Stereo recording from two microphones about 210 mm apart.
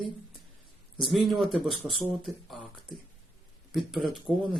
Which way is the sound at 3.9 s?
Centre (ahead or behind).